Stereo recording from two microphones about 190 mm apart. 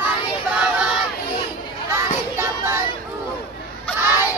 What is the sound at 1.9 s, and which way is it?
Child singing, 15° right (ahead or behind).